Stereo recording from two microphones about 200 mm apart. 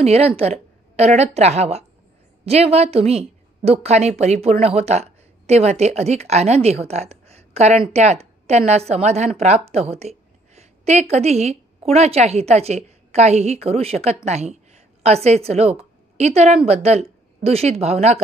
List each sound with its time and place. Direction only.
0.0 s a woman's voice: 30° right (ahead or behind)